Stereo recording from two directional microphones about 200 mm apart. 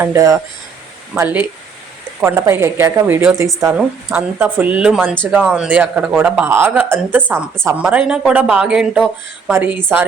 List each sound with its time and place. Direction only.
0.0 s speech: 15° right (ahead or behind)